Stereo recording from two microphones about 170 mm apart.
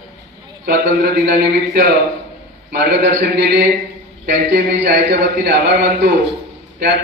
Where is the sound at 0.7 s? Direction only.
65° right (ahead or behind).